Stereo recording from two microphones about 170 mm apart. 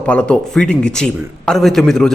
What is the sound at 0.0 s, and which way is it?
A man's voice, 10° left (ahead or behind).